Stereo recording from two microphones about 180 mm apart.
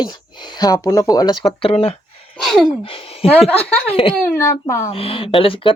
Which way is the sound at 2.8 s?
30° left (ahead or behind).